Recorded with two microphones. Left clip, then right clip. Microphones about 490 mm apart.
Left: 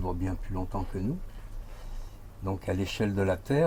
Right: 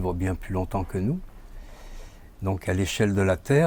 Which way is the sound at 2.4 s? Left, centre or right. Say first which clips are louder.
Right 5 dB; right.